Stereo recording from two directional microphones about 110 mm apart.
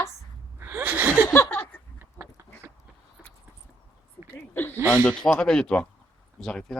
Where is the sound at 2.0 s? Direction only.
25° right (ahead or behind).